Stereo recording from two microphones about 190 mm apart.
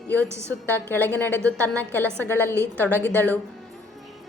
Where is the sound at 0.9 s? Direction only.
10° left (ahead or behind).